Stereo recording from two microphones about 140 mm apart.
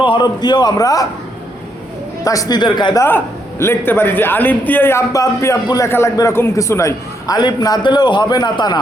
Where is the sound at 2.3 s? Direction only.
25° left (ahead or behind).